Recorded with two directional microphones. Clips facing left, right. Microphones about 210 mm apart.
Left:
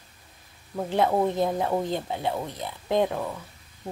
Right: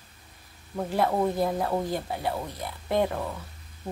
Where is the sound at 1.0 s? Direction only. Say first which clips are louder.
Left 1 dB; 15° left (ahead or behind).